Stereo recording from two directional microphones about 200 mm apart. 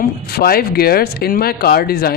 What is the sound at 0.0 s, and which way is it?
Speech, 50° left (ahead or behind).